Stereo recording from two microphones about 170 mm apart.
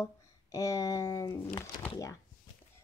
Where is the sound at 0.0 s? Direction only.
20° left (ahead or behind).